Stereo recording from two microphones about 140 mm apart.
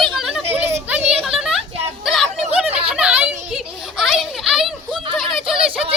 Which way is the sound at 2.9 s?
10° right (ahead or behind).